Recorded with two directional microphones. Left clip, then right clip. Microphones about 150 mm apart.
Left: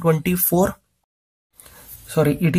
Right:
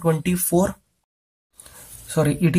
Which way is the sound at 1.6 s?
20° left (ahead or behind).